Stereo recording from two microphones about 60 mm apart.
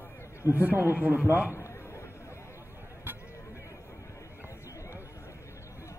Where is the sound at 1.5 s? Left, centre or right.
Left.